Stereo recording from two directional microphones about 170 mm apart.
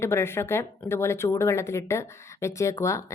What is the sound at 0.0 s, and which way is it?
Speech, 15° left (ahead or behind).